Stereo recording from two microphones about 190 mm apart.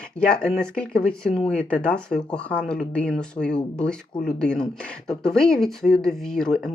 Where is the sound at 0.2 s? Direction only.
5° left (ahead or behind).